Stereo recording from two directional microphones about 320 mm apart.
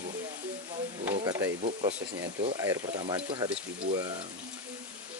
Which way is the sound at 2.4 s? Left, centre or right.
Centre.